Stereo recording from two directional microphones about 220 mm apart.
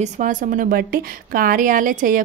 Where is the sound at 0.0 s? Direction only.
35° right (ahead or behind).